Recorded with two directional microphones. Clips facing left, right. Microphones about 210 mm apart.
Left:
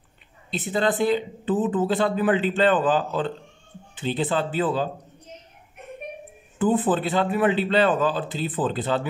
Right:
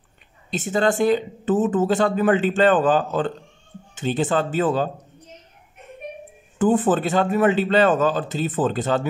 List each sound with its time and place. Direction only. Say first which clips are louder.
0.5 s speech: right 3 dB; 45° right (ahead or behind)
6.6 s speech: right 3 dB; 45° right (ahead or behind)